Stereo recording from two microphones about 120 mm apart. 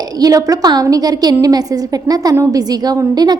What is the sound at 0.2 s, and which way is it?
A woman's voice, 30° right (ahead or behind).